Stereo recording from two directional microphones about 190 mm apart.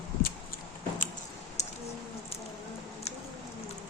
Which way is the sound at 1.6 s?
35° left (ahead or behind).